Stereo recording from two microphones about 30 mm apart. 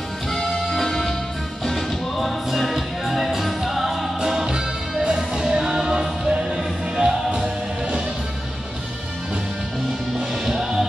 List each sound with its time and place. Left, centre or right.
0.3 s music: centre
2.1 s music: centre; by 8.0 s right